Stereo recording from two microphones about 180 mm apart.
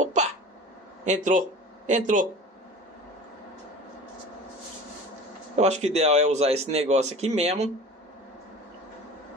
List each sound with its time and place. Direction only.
0.0 s hiccup: 40° right (ahead or behind)
1.0 s speech: 40° right (ahead or behind)
5.6 s speech: 40° right (ahead or behind)